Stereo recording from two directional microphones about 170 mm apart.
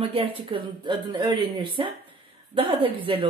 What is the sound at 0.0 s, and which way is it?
Speech, 35° right (ahead or behind).